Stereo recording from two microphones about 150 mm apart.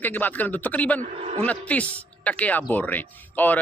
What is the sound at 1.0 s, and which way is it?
Speech, 50° right (ahead or behind).